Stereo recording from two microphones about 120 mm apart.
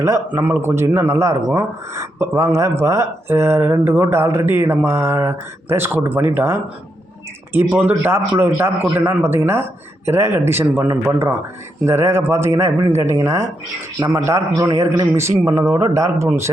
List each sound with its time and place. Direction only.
0.0 s speech: 25° right (ahead or behind)